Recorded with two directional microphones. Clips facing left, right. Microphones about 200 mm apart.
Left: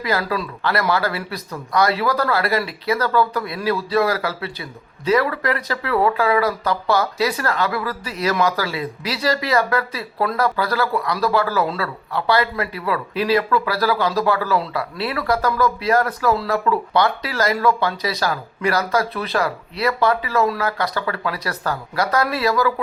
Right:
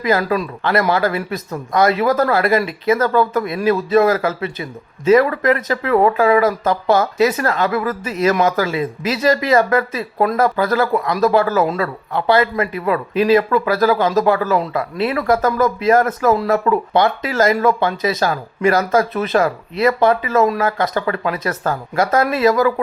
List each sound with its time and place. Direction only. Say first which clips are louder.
0.3 s speech: right 4 dB; 20° right (ahead or behind)
13.9 s speech: right 4 dB; 45° right (ahead or behind)
14.2 s speech: right 4 dB; 20° right (ahead or behind)